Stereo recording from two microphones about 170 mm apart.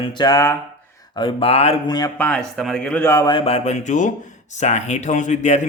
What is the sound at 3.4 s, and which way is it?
A man's voice, 40° left (ahead or behind).